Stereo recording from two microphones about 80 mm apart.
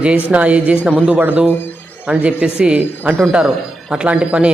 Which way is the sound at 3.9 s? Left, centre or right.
Centre.